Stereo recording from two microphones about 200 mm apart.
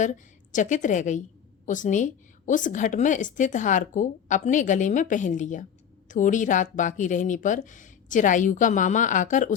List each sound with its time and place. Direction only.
0.0 s a woman's voice: 40° left (ahead or behind)